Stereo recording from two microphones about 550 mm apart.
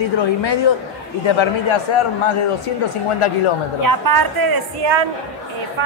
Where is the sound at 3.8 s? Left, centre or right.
Right.